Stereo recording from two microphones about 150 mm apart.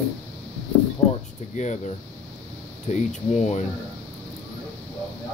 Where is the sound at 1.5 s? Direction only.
50° left (ahead or behind).